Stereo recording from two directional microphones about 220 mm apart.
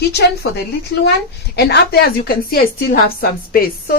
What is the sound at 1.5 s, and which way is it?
A woman's voice, 45° left (ahead or behind).